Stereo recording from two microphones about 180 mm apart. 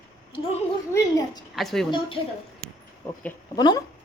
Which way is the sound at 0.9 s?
20° left (ahead or behind).